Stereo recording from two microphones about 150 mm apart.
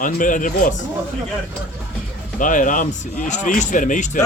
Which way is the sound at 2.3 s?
60° left (ahead or behind).